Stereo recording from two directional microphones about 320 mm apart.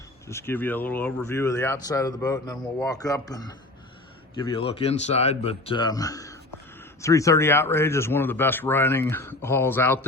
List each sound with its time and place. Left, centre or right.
0.3 s speech: centre